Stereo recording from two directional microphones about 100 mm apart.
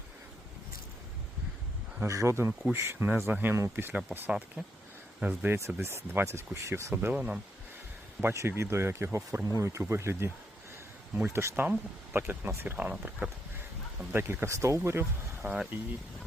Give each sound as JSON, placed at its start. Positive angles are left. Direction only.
{"t": 2.0, "sound": "speech", "side_deg": -30}
{"t": 5.8, "sound": "speech", "side_deg": -25}
{"t": 8.2, "sound": "speech", "side_deg": -25}
{"t": 11.3, "sound": "speech", "side_deg": -25}
{"t": 14.1, "sound": "speech", "side_deg": -25}